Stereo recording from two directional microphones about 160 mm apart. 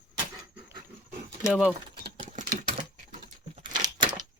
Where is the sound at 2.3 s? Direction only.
50° right (ahead or behind).